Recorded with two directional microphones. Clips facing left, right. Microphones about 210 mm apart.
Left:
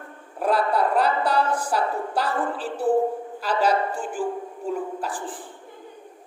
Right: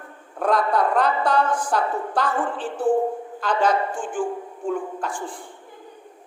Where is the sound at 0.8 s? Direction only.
10° left (ahead or behind).